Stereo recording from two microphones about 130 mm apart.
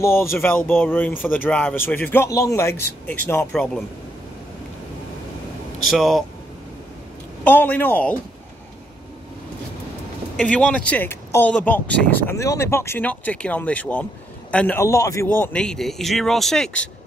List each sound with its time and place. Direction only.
0.0 s speech: 20° left (ahead or behind)
3.5 s speech: 5° left (ahead or behind)
5.9 s speech: centre (ahead or behind)
7.4 s speech: 15° left (ahead or behind)
10.3 s speech: 10° left (ahead or behind)
15.6 s speech: 5° left (ahead or behind)